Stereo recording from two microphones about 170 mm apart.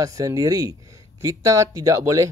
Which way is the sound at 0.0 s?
20° right (ahead or behind).